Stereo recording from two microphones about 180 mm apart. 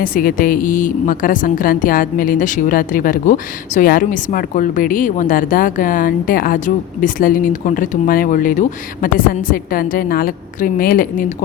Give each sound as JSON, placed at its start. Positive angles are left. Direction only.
{"t": 0.0, "sound": "a woman's voice", "side_deg": 50}